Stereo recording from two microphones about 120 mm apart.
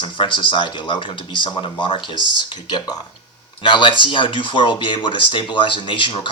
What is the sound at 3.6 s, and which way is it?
Speech, 45° left (ahead or behind).